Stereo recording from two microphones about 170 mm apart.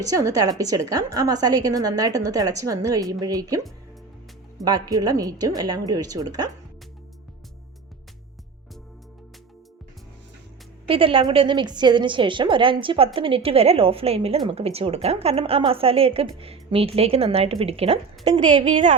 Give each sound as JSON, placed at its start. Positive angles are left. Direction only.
{"t": 0.0, "sound": "a woman's voice", "side_deg": -20}
{"t": 4.6, "sound": "a woman's voice", "side_deg": -20}
{"t": 10.8, "sound": "a woman's voice", "side_deg": -30}